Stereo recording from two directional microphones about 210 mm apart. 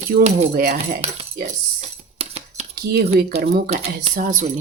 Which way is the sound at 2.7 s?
50° right (ahead or behind).